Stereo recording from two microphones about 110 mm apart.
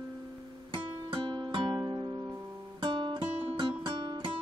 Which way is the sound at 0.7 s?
45° right (ahead or behind).